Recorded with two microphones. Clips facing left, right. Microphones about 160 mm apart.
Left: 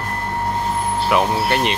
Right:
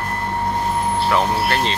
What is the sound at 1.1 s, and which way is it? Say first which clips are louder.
Speech: left 3 dB; 15° left (ahead or behind).